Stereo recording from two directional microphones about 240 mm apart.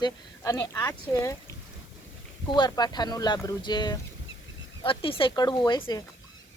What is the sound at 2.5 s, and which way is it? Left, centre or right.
Speech, centre.